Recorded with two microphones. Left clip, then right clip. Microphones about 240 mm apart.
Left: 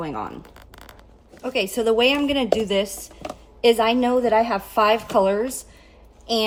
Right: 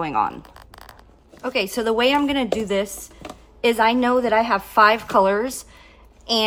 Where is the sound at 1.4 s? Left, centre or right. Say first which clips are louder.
Even; right.